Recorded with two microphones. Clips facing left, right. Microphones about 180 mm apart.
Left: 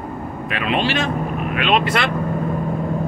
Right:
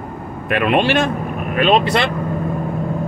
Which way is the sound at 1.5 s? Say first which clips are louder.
Right 5 dB; 40° right (ahead or behind).